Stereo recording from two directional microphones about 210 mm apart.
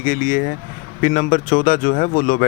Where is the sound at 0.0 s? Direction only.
40° left (ahead or behind).